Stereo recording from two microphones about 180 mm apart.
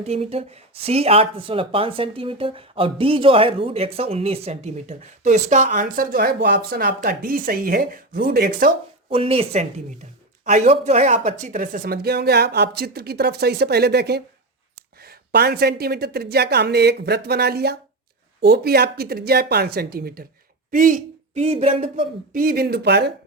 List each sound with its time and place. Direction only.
0.0 s speech: 35° right (ahead or behind); by 8.7 s 55° right (ahead or behind)
9.0 s speech: 30° right (ahead or behind)
22.3 s speech: 55° right (ahead or behind)